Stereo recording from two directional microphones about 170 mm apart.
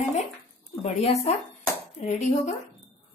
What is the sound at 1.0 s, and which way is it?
Speech, 40° left (ahead or behind).